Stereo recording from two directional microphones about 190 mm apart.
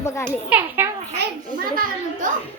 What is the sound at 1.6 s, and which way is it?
Speech, 50° right (ahead or behind).